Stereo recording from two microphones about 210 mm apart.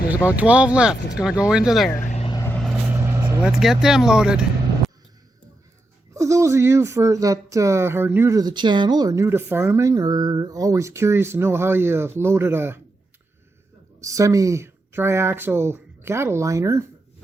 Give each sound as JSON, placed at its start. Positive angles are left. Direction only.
{"t": 0.1, "sound": "speech", "side_deg": -5}
{"t": 2.0, "sound": "vehicle", "side_deg": 35}
{"t": 2.3, "sound": "vehicle", "side_deg": 15}
{"t": 2.6, "sound": "vehicle", "side_deg": 0}
{"t": 2.9, "sound": "vehicle", "side_deg": -10}
{"t": 3.5, "sound": "speech", "side_deg": 0}
{"t": 6.1, "sound": "speech", "side_deg": -15}
{"t": 14.0, "sound": "speech", "side_deg": -15}